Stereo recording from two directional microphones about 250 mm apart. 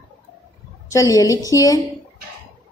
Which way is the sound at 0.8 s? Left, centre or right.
Centre.